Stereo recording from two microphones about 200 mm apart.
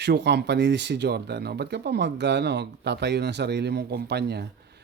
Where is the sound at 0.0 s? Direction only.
55° right (ahead or behind).